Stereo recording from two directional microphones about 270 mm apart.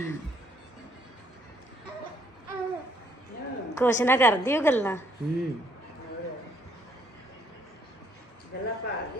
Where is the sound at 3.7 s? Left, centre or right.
Centre.